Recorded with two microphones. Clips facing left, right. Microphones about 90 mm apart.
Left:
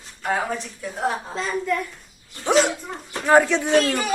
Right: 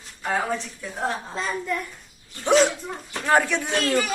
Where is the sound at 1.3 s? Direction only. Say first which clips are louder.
Left 2 dB; centre (ahead or behind).